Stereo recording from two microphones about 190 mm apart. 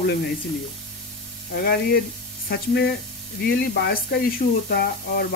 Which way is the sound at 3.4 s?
55° left (ahead or behind).